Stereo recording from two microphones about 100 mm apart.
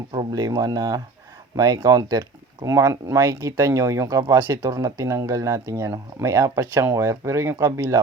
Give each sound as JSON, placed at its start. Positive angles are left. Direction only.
{"t": 0.1, "sound": "speech", "side_deg": -45}
{"t": 2.6, "sound": "speech", "side_deg": -30}